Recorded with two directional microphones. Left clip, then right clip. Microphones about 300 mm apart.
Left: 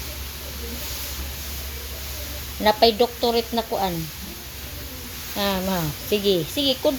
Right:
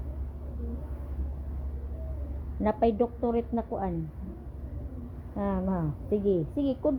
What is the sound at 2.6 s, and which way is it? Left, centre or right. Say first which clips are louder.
A woman's voice: left 9 dB; centre.